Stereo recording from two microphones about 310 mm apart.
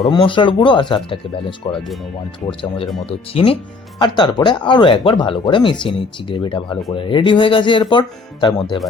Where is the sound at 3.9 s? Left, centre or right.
Centre.